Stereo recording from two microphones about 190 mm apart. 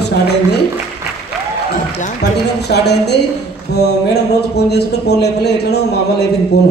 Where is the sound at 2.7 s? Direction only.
60° left (ahead or behind).